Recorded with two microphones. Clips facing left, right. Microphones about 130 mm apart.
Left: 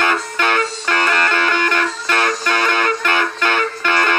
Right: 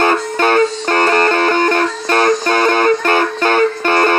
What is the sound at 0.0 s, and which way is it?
Music, 40° right (ahead or behind).